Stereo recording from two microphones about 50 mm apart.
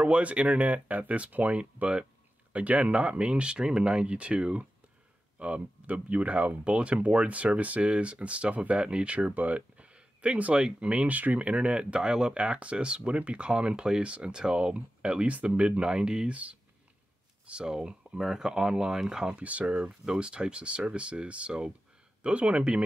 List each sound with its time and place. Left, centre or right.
0.0 s speech: right
17.5 s speech: centre
19.3 s speech: right